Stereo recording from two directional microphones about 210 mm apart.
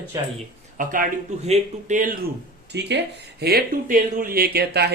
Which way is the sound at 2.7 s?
55° right (ahead or behind).